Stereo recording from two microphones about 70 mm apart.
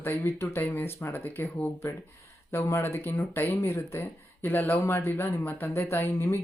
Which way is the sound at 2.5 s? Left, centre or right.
Left.